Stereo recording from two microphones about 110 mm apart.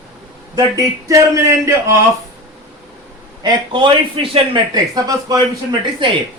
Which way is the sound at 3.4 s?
45° right (ahead or behind).